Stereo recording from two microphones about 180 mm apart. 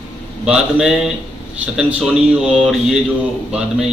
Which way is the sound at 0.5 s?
5° right (ahead or behind).